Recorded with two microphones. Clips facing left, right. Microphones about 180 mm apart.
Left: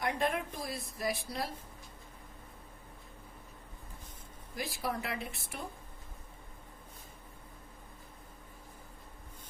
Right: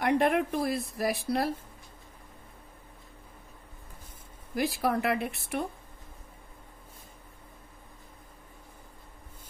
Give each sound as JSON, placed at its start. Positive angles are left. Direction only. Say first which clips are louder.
{"t": 0.0, "sound": "a woman's voice", "louder": "right 8 dB", "side_deg": -70}
{"t": 4.6, "sound": "speech", "louder": "right 9 dB", "side_deg": -70}